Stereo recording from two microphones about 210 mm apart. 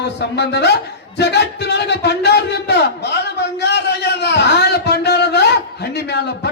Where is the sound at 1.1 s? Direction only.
50° left (ahead or behind).